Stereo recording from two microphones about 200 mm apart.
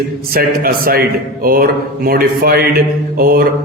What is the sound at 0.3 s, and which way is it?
Mantra, 50° right (ahead or behind).